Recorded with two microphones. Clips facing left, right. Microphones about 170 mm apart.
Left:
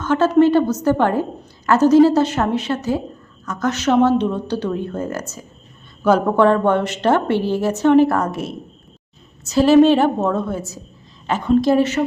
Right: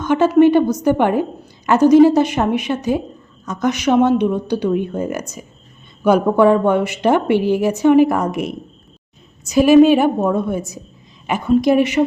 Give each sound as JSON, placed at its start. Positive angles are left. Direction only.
{"t": 0.0, "sound": "a woman's voice", "side_deg": -15}